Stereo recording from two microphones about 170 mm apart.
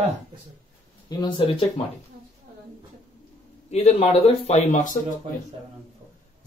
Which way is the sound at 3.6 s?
40° left (ahead or behind).